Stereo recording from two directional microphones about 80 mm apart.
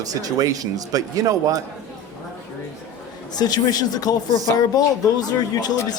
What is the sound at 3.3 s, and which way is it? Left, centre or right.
Speech, left.